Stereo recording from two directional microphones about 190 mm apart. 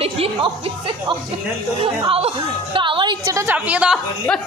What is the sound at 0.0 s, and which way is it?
A woman's voice, 30° right (ahead or behind).